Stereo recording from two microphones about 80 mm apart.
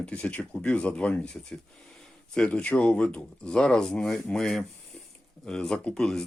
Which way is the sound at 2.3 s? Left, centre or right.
Centre.